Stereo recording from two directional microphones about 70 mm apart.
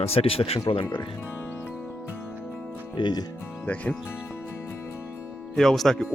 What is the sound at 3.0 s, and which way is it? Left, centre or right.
Speech, left.